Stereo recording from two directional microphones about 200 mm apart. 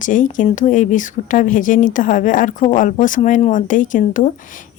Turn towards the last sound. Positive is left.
turn(degrees=40)  # may be behind; listen again after turning